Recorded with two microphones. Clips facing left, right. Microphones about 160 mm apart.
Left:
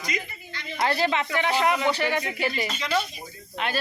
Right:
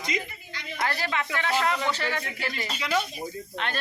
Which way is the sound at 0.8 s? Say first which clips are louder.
Left 5 dB; 20° left (ahead or behind).